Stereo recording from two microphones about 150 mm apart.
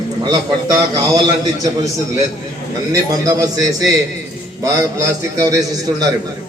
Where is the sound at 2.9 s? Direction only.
25° right (ahead or behind).